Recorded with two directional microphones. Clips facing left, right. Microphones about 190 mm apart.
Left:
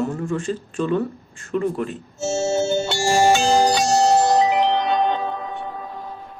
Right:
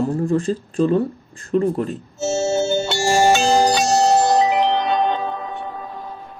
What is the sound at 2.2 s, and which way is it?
Music, 70° right (ahead or behind).